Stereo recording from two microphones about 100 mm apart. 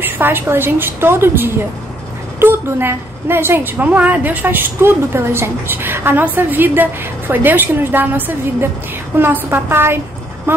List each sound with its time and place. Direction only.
0.0 s a woman's voice: 20° right (ahead or behind)
9.2 s a woman's voice: 20° right (ahead or behind)